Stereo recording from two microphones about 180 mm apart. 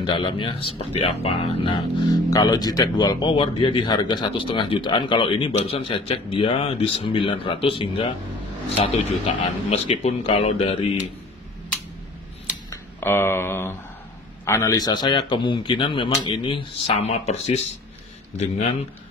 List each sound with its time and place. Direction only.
0.0 s a man's voice: 30° left (ahead or behind)
12.6 s speech: 15° left (ahead or behind); by 17.2 s 35° left (ahead or behind)
18.4 s a man's voice: 35° left (ahead or behind)